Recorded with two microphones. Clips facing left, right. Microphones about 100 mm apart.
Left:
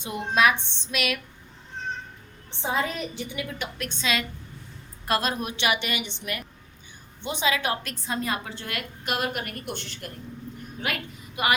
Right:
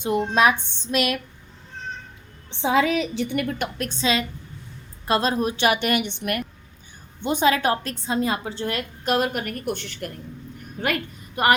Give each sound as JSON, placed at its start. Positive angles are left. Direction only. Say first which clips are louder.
{"t": 0.0, "sound": "a woman's voice", "louder": "right 4 dB", "side_deg": -40}
{"t": 2.6, "sound": "a woman's voice", "louder": "right 7 dB", "side_deg": -90}
{"t": 3.8, "sound": "a woman's voice", "louder": "right 3 dB", "side_deg": -40}
{"t": 7.3, "sound": "a woman's voice", "louder": "right 6 dB", "side_deg": -45}
{"t": 9.0, "sound": "a woman's voice", "louder": "right 6 dB", "side_deg": -45}